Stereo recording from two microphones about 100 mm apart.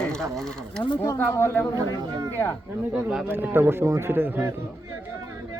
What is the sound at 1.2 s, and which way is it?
Speech, 20° left (ahead or behind).